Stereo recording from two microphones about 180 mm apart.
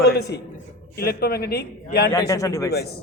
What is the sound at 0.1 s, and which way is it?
A man's voice, 65° left (ahead or behind).